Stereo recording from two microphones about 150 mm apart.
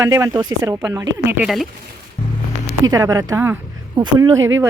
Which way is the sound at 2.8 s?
25° right (ahead or behind).